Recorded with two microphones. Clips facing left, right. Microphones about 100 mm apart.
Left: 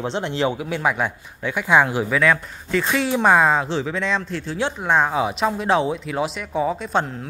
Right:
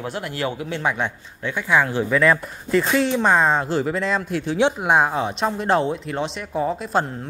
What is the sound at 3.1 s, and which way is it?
Speech, 10° left (ahead or behind).